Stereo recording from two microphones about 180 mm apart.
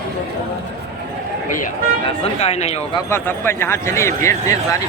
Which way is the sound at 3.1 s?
15° left (ahead or behind).